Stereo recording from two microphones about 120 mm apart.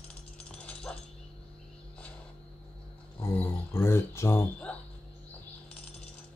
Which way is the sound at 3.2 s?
20° left (ahead or behind).